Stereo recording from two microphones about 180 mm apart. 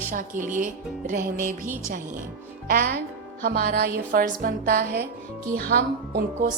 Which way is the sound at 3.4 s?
55° right (ahead or behind).